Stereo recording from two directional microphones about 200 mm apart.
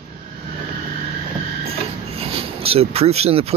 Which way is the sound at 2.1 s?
30° right (ahead or behind).